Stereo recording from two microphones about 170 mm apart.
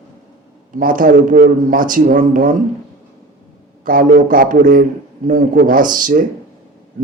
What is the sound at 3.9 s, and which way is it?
A man's voice, 55° right (ahead or behind).